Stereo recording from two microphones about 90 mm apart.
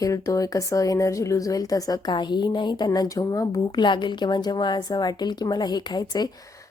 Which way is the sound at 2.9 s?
45° left (ahead or behind).